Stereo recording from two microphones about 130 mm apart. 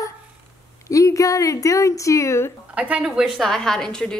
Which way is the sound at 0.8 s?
25° left (ahead or behind).